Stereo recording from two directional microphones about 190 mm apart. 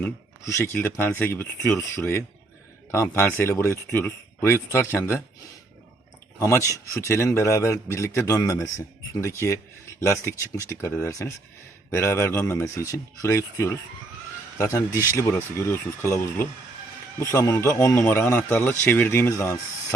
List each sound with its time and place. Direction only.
0.0 s speech: 15° left (ahead or behind)
6.4 s speech: 15° left (ahead or behind)